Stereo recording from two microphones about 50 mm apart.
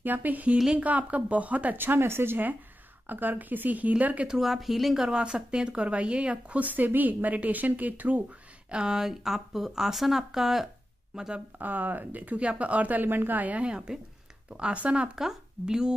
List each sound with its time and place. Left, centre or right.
0.0 s speech: right
1.8 s speech: right
4.4 s speech: centre; by 8.2 s right
8.6 s a woman's voice: centre
11.5 s speech: right
15.1 s speech: centre